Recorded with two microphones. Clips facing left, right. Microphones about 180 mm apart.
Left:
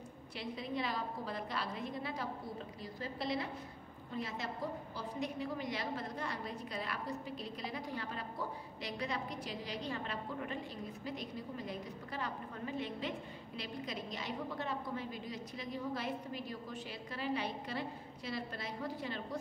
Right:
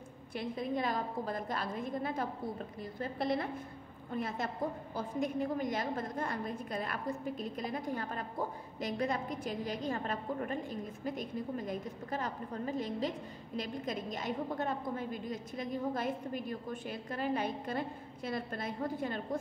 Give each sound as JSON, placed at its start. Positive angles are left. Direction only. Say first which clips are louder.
{"t": 0.3, "sound": "a woman's voice", "louder": "right 5 dB", "side_deg": -50}